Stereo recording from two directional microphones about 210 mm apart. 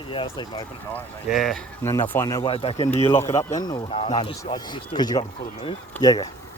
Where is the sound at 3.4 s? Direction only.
15° left (ahead or behind).